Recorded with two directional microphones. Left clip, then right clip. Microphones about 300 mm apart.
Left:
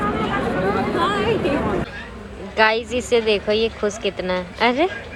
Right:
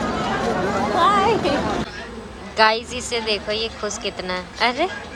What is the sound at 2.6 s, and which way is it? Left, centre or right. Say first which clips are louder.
A woman's voice: even; centre.